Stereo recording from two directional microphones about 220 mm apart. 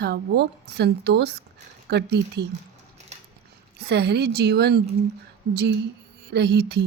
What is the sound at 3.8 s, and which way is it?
Speech, 50° right (ahead or behind).